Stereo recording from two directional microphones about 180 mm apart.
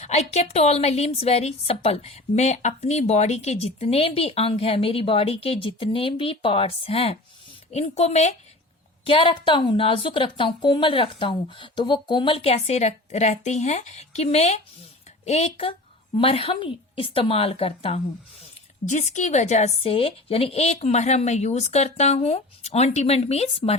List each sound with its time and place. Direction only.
0.0 s a woman's voice: 35° left (ahead or behind)
9.0 s a woman's voice: 30° left (ahead or behind)